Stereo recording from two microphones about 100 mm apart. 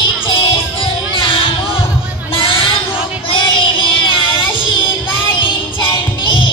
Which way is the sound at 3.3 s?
60° left (ahead or behind).